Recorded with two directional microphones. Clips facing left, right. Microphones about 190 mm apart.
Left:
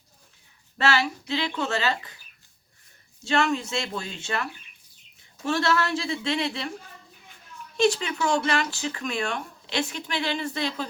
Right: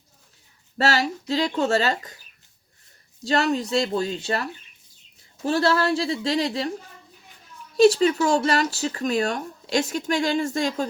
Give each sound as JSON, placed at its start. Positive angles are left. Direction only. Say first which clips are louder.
{"t": 0.8, "sound": "speech", "louder": "right 2 dB", "side_deg": -40}
{"t": 3.2, "sound": "speech", "louder": "right 2 dB", "side_deg": -35}
{"t": 5.5, "sound": "speech", "louder": "right 4 dB", "side_deg": -30}
{"t": 7.8, "sound": "speech", "louder": "right 7 dB", "side_deg": -40}